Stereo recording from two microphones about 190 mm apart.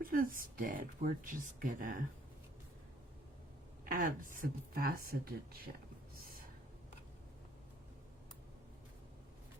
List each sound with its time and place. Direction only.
0.0 s speech: 50° right (ahead or behind)
3.8 s speech: 45° right (ahead or behind)